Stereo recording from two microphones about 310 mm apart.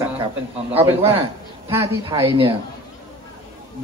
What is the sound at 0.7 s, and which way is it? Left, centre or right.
A man's voice, centre.